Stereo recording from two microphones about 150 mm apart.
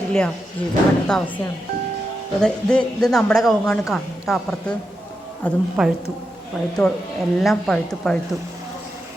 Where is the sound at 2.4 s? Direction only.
5° left (ahead or behind).